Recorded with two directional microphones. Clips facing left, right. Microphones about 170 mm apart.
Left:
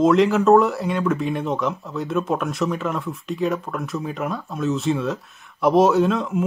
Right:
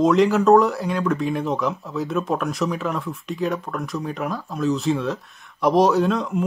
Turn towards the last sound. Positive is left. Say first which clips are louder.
# left 1 dB
turn(degrees=0)  # may be behind; listen again after turning